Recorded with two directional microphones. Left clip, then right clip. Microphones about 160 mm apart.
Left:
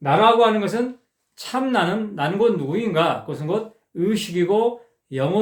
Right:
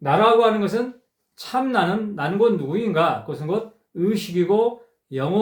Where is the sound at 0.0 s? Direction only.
20° left (ahead or behind).